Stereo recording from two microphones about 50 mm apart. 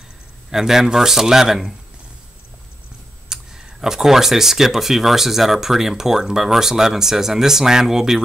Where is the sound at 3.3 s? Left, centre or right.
Centre.